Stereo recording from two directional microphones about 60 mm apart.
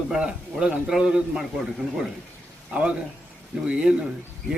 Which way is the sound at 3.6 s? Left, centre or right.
Centre.